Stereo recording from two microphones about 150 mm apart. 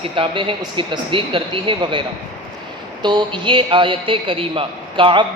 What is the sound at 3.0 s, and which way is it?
Speech, 30° right (ahead or behind).